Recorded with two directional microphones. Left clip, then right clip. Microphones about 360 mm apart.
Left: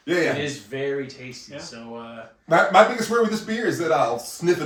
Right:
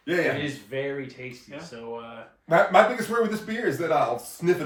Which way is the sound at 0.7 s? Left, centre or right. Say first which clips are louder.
Left 4 dB; right.